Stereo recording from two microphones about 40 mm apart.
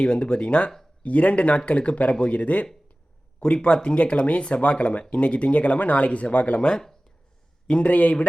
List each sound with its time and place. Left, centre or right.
0.0 s speech: left
1.0 s speech: left
3.4 s speech: left